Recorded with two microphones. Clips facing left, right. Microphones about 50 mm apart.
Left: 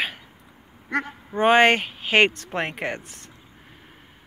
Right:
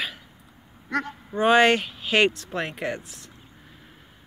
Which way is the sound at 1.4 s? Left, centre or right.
Left.